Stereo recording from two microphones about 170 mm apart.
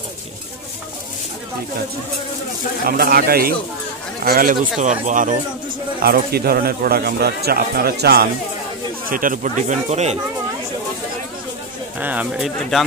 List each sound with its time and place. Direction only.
2.9 s speech: 60° right (ahead or behind)
5.9 s speech: 60° right (ahead or behind)
9.1 s speech: 50° right (ahead or behind)
12.0 s speech: 10° right (ahead or behind)